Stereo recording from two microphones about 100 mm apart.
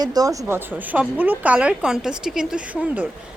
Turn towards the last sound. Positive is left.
turn(degrees=-15)  # may be behind; listen again after turning